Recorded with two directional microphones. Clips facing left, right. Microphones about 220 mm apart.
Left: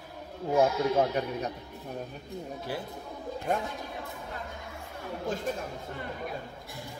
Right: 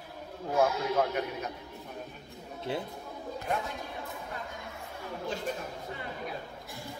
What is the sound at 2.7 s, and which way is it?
Speech, 25° right (ahead or behind).